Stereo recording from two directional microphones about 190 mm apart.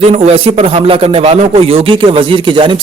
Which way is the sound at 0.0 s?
30° right (ahead or behind).